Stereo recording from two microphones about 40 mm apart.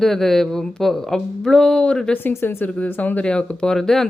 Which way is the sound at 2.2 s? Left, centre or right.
Left.